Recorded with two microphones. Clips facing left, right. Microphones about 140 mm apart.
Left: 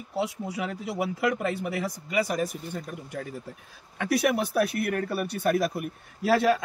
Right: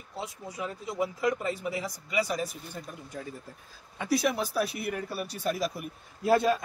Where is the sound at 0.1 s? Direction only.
75° left (ahead or behind); by 2.5 s 55° left (ahead or behind).